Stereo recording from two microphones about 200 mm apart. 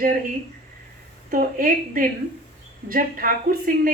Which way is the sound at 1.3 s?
45° right (ahead or behind).